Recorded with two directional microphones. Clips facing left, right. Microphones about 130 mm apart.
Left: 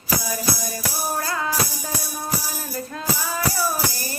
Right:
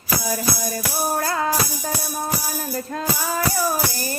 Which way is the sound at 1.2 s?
35° right (ahead or behind).